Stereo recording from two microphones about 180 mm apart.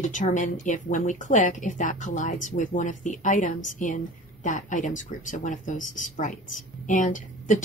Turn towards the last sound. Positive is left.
turn(degrees=45)  # may be behind; listen again after turning